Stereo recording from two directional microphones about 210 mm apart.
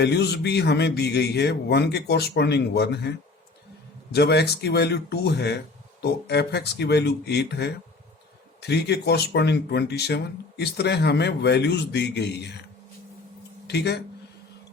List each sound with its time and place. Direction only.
0.0 s speech: 50° left (ahead or behind)
13.7 s speech: 55° left (ahead or behind)